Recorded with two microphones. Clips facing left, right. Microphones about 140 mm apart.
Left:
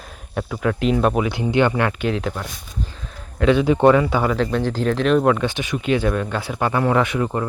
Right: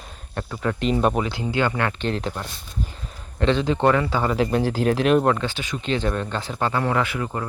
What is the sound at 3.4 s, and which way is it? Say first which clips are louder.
Speech: left 5 dB; 10° left (ahead or behind).